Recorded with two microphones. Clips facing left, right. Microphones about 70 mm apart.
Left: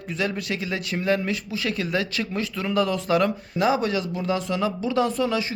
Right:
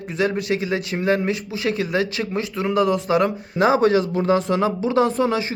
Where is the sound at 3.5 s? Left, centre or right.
Right.